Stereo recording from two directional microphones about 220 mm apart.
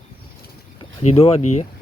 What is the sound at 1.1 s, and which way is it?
Speech, 30° left (ahead or behind).